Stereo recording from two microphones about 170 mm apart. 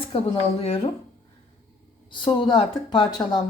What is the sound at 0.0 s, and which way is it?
Speech, 35° left (ahead or behind).